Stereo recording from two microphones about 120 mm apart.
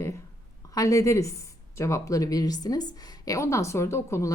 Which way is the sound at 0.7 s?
30° left (ahead or behind).